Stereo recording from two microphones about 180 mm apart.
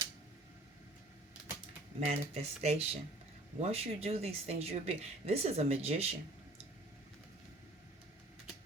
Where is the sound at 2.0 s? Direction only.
35° right (ahead or behind).